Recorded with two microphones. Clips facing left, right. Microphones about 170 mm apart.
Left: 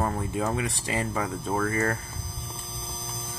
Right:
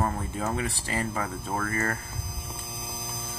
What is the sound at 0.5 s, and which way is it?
Speech, 15° left (ahead or behind).